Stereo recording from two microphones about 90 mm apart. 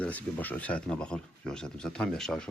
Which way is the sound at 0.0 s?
15° left (ahead or behind).